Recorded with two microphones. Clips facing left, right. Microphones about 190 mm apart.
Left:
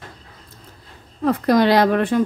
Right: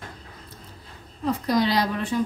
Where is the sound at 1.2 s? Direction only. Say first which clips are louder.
Left 6 dB; 60° left (ahead or behind).